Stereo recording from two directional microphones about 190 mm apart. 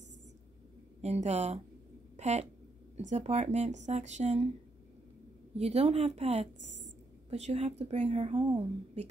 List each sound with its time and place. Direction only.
1.0 s speech: 35° right (ahead or behind)
2.1 s a sound: 35° right (ahead or behind)
3.0 s speech: 40° right (ahead or behind)
5.6 s speech: 35° right (ahead or behind)